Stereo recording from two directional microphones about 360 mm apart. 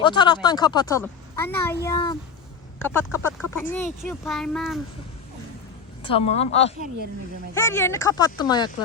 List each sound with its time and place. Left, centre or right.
0.0 s speech: centre
6.1 s speech: centre